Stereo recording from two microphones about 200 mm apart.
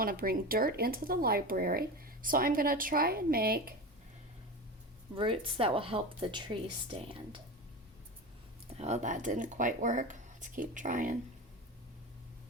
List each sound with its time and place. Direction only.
0.0 s speech: 45° right (ahead or behind)
5.1 s speech: 25° right (ahead or behind)
8.8 s speech: 35° right (ahead or behind)